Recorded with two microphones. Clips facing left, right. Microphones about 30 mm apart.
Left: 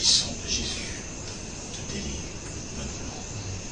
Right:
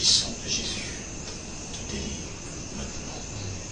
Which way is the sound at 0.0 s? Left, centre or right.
Centre.